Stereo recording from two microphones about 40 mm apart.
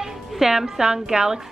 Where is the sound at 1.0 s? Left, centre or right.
Centre.